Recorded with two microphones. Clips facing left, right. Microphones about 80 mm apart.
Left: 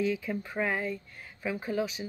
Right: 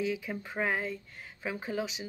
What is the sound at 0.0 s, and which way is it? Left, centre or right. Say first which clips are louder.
Speech: left 3 dB; centre.